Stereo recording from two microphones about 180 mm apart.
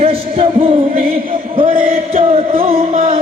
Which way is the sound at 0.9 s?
55° right (ahead or behind).